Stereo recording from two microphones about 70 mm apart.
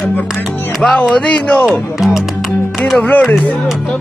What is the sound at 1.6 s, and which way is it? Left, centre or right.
Music, centre.